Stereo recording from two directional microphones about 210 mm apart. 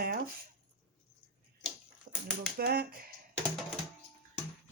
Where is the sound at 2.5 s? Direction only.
50° right (ahead or behind).